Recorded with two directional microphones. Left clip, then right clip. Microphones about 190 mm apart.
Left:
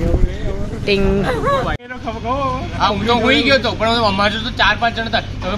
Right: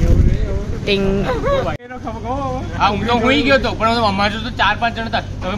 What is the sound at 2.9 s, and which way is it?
Speech, centre (ahead or behind).